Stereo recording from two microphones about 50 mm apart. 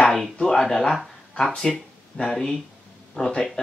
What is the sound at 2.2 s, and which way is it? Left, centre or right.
Speech, centre.